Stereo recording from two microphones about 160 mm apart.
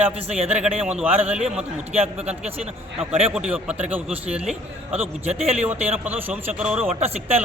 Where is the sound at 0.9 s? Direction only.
10° right (ahead or behind).